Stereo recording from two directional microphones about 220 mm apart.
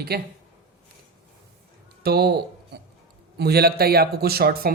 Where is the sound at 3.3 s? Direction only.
45° right (ahead or behind).